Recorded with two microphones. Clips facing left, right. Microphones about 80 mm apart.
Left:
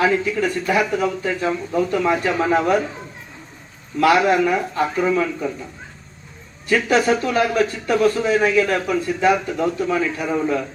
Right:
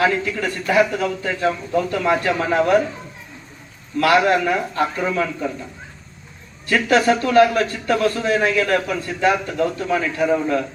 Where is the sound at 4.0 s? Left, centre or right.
Centre.